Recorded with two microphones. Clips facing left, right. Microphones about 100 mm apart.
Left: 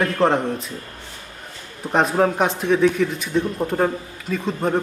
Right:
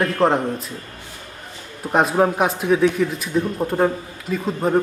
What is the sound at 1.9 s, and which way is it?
A man's voice, 5° right (ahead or behind).